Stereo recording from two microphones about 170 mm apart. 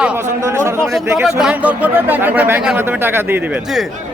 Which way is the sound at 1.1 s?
5° right (ahead or behind).